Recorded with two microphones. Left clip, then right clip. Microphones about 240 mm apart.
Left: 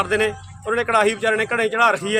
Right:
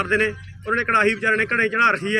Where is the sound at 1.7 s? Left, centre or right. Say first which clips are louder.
Left 1 dB; left.